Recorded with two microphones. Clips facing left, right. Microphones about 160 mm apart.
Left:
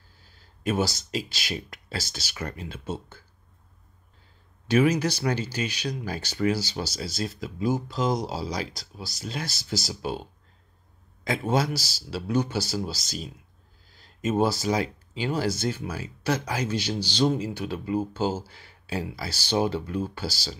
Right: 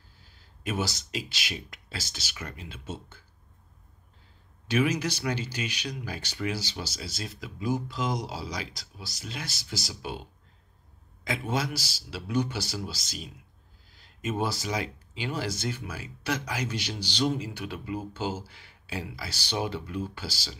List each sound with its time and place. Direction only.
0.7 s speech: 30° left (ahead or behind)
4.6 s speech: 35° left (ahead or behind)
11.5 s speech: 35° left (ahead or behind)